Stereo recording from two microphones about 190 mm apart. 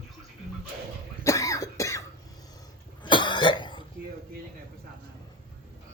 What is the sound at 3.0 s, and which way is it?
Cough, 25° left (ahead or behind).